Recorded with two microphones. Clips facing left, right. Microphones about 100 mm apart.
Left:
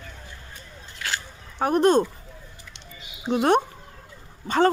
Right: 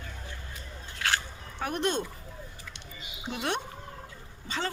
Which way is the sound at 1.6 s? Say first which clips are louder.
Left 11 dB; 40° left (ahead or behind).